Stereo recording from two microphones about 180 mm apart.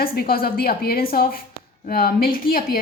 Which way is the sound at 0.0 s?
55° left (ahead or behind).